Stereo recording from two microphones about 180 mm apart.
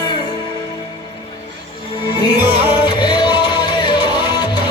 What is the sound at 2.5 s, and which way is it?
Music, 25° left (ahead or behind).